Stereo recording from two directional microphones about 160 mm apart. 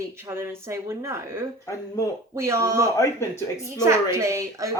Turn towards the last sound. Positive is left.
turn(degrees=-20)  # may be behind; listen again after turning